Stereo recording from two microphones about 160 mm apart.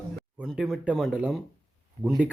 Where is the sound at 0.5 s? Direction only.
5° right (ahead or behind).